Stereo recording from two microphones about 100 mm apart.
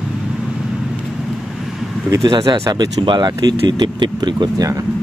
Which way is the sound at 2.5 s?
35° right (ahead or behind).